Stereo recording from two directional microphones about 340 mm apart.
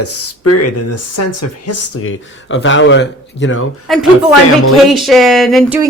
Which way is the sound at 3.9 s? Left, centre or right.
Centre.